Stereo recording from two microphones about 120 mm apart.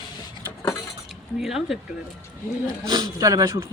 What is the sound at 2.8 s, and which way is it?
Speech, 35° right (ahead or behind).